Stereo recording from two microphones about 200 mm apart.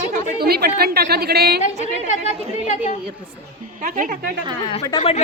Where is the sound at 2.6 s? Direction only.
35° left (ahead or behind).